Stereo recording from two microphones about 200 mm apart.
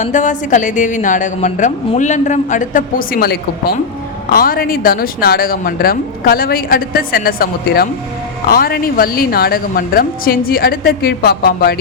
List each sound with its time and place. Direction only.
0.0 s a woman's voice: 40° left (ahead or behind)